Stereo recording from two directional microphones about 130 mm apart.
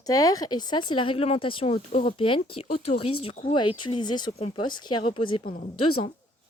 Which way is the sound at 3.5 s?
35° left (ahead or behind).